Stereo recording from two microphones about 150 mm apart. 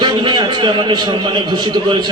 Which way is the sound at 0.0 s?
30° right (ahead or behind).